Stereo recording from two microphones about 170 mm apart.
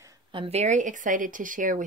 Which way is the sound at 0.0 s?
25° right (ahead or behind).